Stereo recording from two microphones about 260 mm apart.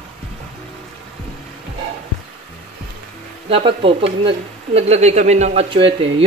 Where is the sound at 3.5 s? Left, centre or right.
Right.